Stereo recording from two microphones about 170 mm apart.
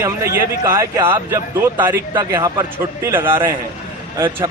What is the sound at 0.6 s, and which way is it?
Speech, 20° right (ahead or behind).